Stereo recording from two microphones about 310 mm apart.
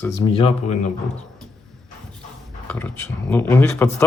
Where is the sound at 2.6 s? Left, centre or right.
Centre.